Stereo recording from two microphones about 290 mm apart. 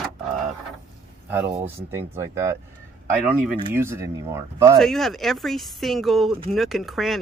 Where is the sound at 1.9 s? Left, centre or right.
Centre.